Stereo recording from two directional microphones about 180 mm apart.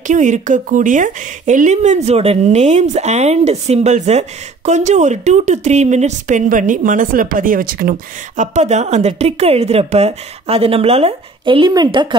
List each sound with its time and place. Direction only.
0.0 s speech: 45° right (ahead or behind)
8.4 s speech: 40° right (ahead or behind)